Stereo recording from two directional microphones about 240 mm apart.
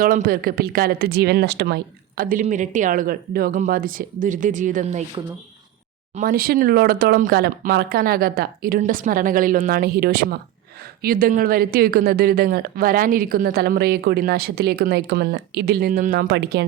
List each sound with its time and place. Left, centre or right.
0.0 s speech: right